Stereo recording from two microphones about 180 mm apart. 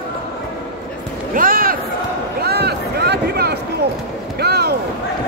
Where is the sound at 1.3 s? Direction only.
50° right (ahead or behind).